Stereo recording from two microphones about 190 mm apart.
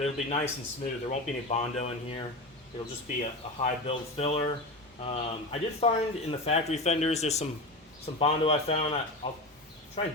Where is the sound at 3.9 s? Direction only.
30° left (ahead or behind).